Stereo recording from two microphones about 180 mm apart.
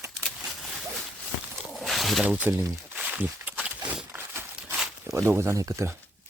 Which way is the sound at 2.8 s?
5° right (ahead or behind).